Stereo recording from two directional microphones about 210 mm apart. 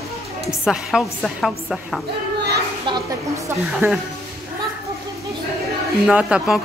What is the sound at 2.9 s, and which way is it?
A woman's voice, 15° right (ahead or behind).